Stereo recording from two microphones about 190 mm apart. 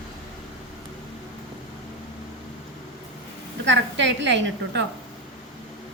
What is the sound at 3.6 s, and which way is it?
A woman's voice, 70° right (ahead or behind).